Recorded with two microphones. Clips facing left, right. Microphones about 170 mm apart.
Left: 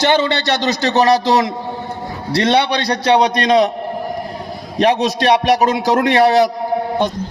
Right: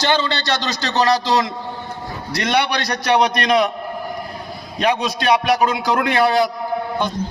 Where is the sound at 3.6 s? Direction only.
35° left (ahead or behind).